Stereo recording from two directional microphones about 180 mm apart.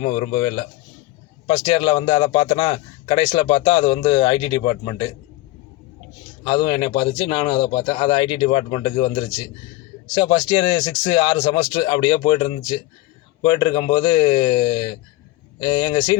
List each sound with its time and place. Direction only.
0.1 s a man's voice: 30° left (ahead or behind)
6.4 s a man's voice: 25° left (ahead or behind)